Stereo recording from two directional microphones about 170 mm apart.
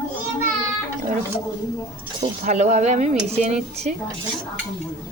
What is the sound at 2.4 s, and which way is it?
A woman's voice, 40° right (ahead or behind).